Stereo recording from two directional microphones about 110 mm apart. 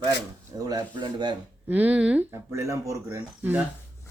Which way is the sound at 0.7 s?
40° right (ahead or behind).